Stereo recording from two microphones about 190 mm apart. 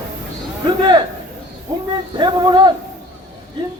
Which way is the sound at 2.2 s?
25° right (ahead or behind).